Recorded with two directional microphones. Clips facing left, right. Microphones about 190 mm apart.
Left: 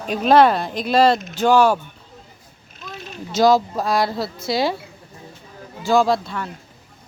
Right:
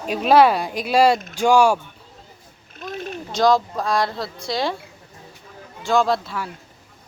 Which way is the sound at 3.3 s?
5° left (ahead or behind).